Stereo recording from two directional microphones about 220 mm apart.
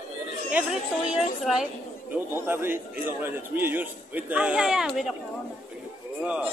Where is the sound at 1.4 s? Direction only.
Centre (ahead or behind).